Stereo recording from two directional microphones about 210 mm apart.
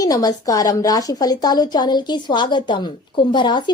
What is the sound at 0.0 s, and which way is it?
A woman's voice, 15° left (ahead or behind).